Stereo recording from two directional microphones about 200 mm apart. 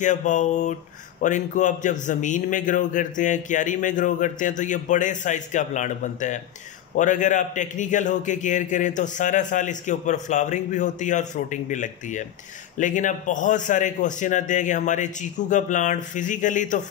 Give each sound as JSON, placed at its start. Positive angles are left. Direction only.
{"t": 0.0, "sound": "a man's voice", "side_deg": 40}